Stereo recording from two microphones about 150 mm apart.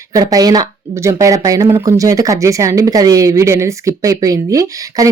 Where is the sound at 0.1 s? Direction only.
25° right (ahead or behind).